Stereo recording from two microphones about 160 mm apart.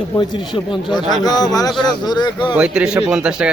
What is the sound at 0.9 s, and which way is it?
Speech, 25° left (ahead or behind).